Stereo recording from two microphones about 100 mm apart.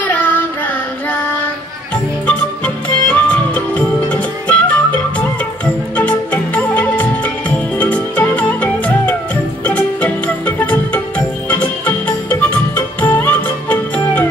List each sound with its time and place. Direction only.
0.0 s child singing: 20° left (ahead or behind)
2.2 s music: 15° left (ahead or behind)